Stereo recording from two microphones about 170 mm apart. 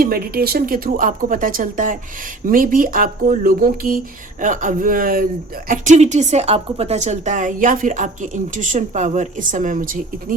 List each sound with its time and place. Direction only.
0.0 s speech: 60° right (ahead or behind)